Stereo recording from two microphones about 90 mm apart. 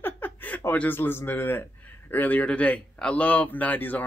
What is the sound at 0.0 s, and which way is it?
Speech, 20° left (ahead or behind).